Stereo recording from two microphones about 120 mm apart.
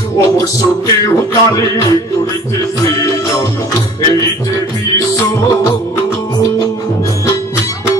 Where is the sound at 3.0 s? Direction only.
30° left (ahead or behind).